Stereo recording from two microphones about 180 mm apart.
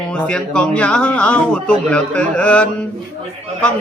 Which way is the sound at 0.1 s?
5° left (ahead or behind).